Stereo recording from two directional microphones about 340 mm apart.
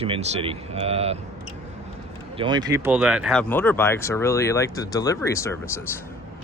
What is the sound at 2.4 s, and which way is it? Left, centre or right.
Speech, centre.